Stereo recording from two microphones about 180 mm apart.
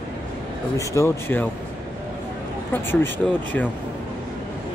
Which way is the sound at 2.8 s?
10° left (ahead or behind).